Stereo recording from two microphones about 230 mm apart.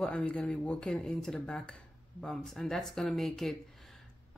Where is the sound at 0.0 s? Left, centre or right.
Centre.